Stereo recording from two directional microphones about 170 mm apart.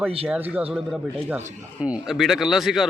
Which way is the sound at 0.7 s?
5° right (ahead or behind).